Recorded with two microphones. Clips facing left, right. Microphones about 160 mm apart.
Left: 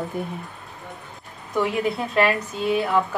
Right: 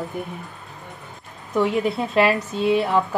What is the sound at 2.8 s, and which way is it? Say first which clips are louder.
Music: right 1 dB; 30° right (ahead or behind).